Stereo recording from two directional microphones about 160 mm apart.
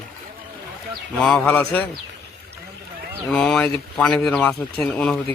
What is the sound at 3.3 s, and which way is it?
Speech, 5° left (ahead or behind).